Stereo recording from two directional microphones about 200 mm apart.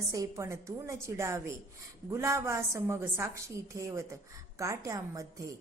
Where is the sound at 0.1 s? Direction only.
15° right (ahead or behind).